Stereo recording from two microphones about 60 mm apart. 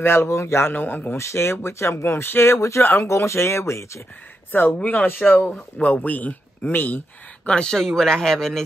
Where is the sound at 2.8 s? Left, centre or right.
Left.